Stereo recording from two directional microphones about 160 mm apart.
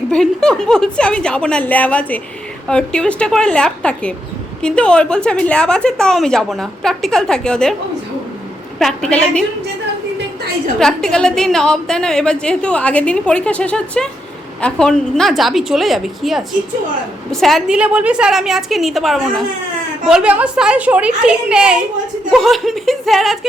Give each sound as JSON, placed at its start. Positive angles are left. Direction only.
{"t": 0.1, "sound": "a woman's voice", "side_deg": 5}
{"t": 8.8, "sound": "a woman's voice", "side_deg": 5}
{"t": 10.8, "sound": "a woman's voice", "side_deg": 5}